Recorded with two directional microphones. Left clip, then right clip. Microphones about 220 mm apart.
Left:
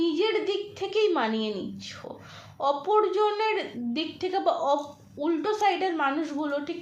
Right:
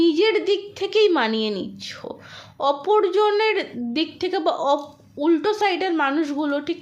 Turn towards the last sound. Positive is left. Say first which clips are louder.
# right 6 dB
turn(degrees=-50)  # may be behind; listen again after turning